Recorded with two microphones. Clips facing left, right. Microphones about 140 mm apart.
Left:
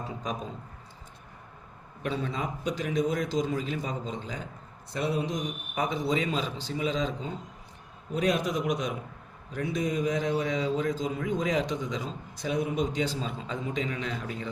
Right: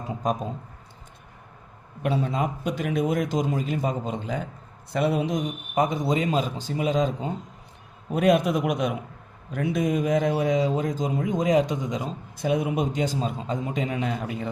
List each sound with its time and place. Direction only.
0.2 s a man's voice: 50° right (ahead or behind)
2.2 s a man's voice: 50° right (ahead or behind)
4.9 s speech: 70° right (ahead or behind)
5.7 s a man's voice: 45° right (ahead or behind)